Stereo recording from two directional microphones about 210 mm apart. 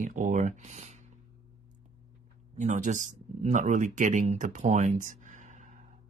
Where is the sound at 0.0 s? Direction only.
40° right (ahead or behind).